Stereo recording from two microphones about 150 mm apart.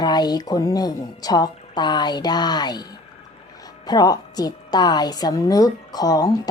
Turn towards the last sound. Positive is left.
turn(degrees=25)  # may be behind; listen again after turning